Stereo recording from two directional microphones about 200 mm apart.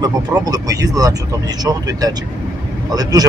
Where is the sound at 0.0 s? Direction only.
20° right (ahead or behind).